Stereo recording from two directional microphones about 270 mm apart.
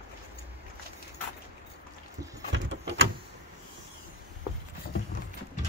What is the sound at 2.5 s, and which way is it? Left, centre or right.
Vehicle, right.